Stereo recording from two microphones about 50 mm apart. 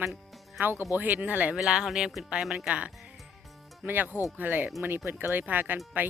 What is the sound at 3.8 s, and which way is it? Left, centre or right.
Speech, right.